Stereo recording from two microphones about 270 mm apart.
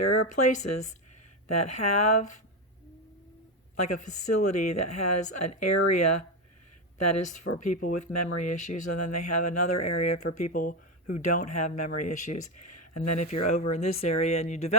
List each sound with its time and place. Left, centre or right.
0.0 s a sound: left
0.3 s speech: left
3.8 s speech: left
10.5 s speech: left
11.8 s speech: left
13.5 s speech: left